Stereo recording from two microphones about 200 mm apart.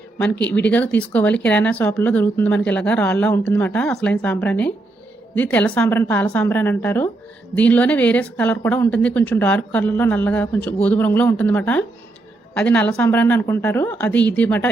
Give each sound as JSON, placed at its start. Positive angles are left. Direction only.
{"t": 0.4, "sound": "a woman's voice", "side_deg": 5}